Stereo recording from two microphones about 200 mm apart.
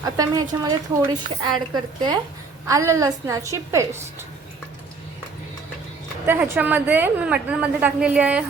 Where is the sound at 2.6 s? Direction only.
15° right (ahead or behind).